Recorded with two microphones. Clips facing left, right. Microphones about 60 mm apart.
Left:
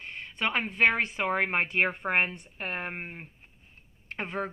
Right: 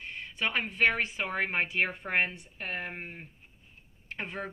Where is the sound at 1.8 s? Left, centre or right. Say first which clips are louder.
Left 4 dB; left.